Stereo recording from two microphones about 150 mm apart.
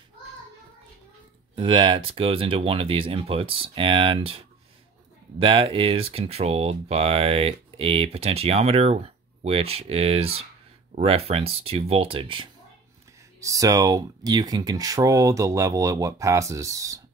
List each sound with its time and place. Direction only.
1.5 s speech: 35° right (ahead or behind)
5.4 s speech: 35° right (ahead or behind)
13.4 s speech: 20° right (ahead or behind)